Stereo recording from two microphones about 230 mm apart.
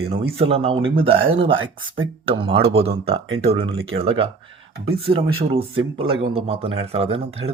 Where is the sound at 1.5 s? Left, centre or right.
Right.